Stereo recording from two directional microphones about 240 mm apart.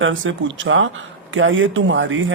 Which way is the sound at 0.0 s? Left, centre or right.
Right.